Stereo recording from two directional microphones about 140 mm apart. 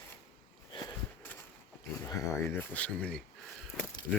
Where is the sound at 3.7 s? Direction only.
5° left (ahead or behind).